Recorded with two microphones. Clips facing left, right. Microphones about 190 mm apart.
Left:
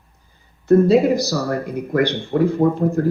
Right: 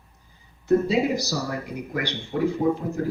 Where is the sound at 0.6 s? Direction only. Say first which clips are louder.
Left 7 dB; 55° left (ahead or behind).